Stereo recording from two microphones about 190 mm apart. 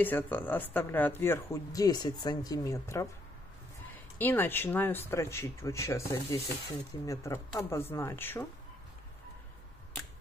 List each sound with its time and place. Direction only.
0.0 s speech: 10° left (ahead or behind)
4.2 s speech: 10° left (ahead or behind)